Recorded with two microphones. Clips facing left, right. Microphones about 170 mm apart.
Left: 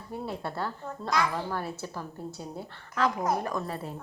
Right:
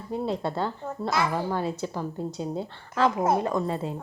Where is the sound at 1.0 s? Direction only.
10° right (ahead or behind).